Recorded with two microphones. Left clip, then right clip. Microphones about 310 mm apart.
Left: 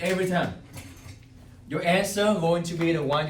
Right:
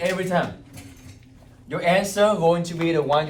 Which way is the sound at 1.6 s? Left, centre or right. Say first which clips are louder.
Right 4 dB; right.